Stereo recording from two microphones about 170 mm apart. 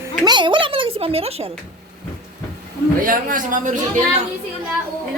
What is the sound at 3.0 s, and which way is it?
A woman's voice, 55° right (ahead or behind).